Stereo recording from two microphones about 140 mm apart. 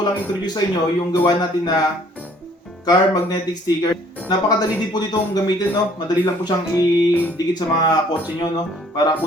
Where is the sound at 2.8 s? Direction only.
25° left (ahead or behind).